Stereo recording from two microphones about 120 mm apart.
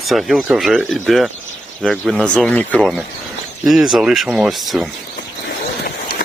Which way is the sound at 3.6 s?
Centre (ahead or behind).